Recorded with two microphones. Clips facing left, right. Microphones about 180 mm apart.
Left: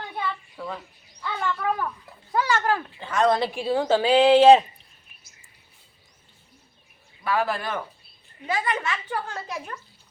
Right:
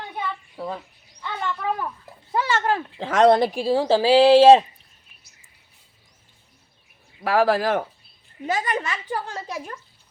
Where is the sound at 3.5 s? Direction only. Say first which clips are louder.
Right 3 dB; 35° right (ahead or behind).